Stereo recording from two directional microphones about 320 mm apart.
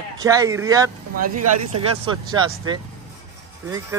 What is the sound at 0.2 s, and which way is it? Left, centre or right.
Speech, centre.